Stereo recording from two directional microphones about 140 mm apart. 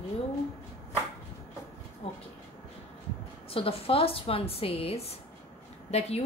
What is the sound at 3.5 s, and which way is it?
A woman's voice, 40° left (ahead or behind).